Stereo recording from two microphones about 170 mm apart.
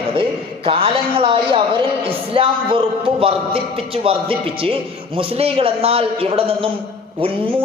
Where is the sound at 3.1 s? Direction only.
35° right (ahead or behind).